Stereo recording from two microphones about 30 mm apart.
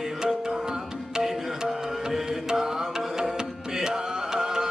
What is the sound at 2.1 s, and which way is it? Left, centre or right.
Music, centre.